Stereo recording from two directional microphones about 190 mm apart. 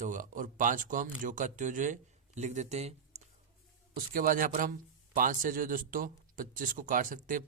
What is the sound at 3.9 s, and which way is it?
Speech, 45° right (ahead or behind).